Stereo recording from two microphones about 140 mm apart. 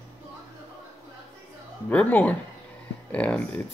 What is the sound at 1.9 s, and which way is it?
Speech, 10° left (ahead or behind).